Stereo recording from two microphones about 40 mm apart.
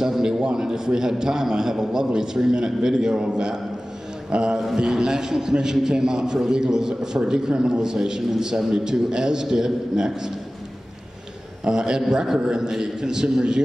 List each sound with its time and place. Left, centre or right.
0.0 s a man's voice: centre
4.3 s mantra: centre
4.7 s a man's voice: centre
11.6 s a man's voice: centre